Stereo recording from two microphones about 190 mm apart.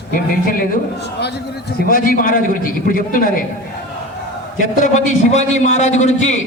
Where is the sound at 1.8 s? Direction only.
50° left (ahead or behind).